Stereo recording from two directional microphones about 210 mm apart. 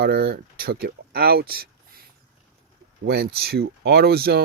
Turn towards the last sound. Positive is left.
turn(degrees=-50)  # may be behind; listen again after turning